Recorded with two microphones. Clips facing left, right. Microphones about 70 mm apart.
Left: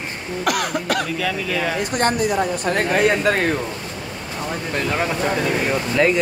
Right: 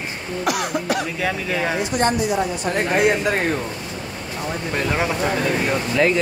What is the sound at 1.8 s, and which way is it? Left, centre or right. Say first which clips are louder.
Speech: left 1 dB; left.